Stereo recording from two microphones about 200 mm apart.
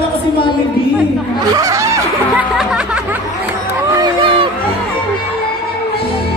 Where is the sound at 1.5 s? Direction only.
15° right (ahead or behind).